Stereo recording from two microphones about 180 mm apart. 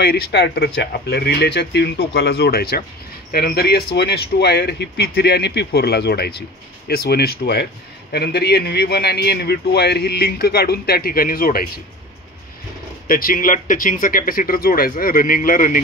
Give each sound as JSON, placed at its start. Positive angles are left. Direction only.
{"t": 0.0, "sound": "a man's voice", "side_deg": 65}
{"t": 13.1, "sound": "speech", "side_deg": 50}